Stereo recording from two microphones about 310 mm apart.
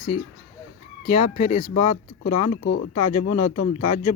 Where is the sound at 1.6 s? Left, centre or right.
Left.